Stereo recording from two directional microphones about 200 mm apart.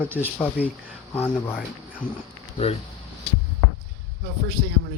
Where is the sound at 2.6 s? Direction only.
30° left (ahead or behind).